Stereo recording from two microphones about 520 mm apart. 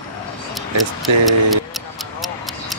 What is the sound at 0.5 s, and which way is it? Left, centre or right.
Speech, centre.